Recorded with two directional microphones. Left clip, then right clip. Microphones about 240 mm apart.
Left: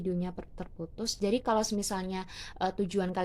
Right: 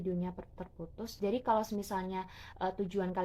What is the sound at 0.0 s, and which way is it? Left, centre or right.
Speech, left.